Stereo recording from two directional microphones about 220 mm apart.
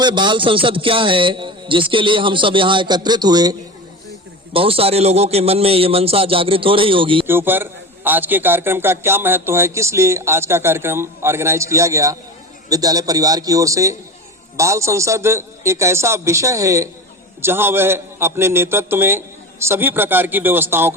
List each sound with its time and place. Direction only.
0.0 s a man's voice: 20° right (ahead or behind)
4.5 s a man's voice: 25° right (ahead or behind)
7.3 s a man's voice: 10° right (ahead or behind)